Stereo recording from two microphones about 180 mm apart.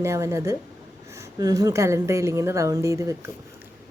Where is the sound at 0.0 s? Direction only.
15° right (ahead or behind).